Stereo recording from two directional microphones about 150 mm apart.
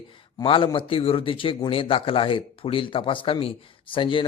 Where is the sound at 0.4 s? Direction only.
35° left (ahead or behind).